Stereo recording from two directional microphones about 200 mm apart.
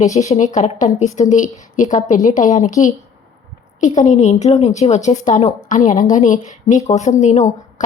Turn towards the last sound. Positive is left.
turn(degrees=35)  # may be behind; listen again after turning